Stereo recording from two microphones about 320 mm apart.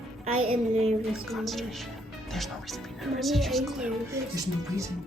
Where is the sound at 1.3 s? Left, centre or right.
Centre.